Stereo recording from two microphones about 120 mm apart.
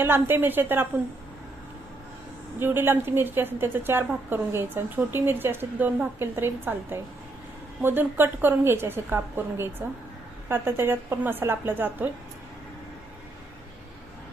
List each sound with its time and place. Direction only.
0.0 s a woman's voice: 20° right (ahead or behind)
2.6 s a woman's voice: 20° right (ahead or behind)